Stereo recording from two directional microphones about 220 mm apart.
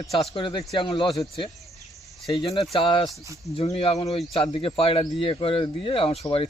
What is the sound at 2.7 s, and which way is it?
Speech, 20° left (ahead or behind).